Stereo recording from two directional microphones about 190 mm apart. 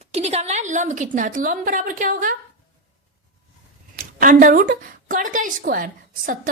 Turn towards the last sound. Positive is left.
turn(degrees=-45)  # may be behind; listen again after turning